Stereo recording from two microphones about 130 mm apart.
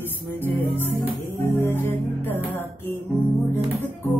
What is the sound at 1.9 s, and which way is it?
Music, 15° left (ahead or behind).